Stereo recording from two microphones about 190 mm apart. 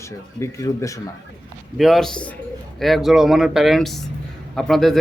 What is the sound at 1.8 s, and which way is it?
Speech, centre (ahead or behind).